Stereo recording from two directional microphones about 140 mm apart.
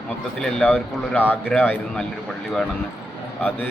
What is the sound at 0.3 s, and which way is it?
Speech, 5° left (ahead or behind).